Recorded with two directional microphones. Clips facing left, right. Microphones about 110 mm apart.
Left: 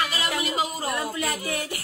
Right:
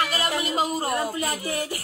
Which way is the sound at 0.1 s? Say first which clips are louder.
Right 2 dB; 40° right (ahead or behind).